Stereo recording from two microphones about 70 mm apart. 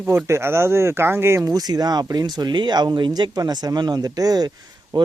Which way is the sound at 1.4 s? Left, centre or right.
Right.